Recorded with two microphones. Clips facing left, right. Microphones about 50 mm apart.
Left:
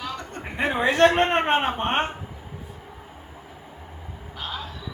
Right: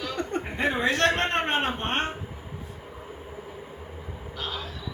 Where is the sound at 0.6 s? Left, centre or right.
Left.